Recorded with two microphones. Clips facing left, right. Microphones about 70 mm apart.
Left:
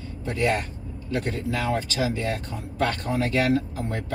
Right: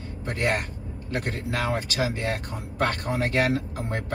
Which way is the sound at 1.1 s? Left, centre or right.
Right.